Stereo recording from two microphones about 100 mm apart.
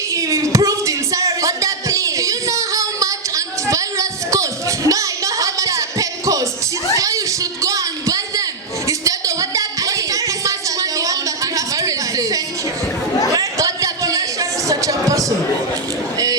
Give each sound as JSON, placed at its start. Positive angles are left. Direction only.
{"t": 0.1, "sound": "music", "side_deg": -35}
{"t": 6.9, "sound": "a sound", "side_deg": -35}
{"t": 13.3, "sound": "music", "side_deg": -35}